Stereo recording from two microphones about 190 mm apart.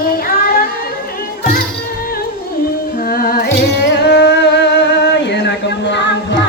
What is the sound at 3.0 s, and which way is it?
Music, 50° left (ahead or behind).